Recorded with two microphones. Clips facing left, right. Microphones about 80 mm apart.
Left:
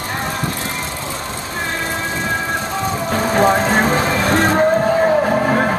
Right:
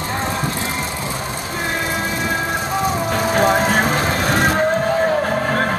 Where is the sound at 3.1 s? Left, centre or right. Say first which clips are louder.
Left 3 dB; centre.